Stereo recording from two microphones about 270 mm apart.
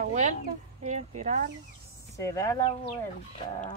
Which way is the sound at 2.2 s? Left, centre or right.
Centre.